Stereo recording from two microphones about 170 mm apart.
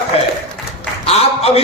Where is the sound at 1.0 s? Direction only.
35° left (ahead or behind).